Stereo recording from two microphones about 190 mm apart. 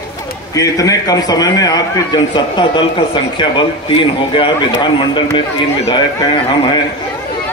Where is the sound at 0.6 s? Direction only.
20° left (ahead or behind).